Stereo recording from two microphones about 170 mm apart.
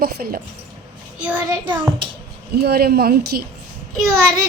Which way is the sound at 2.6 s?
70° right (ahead or behind).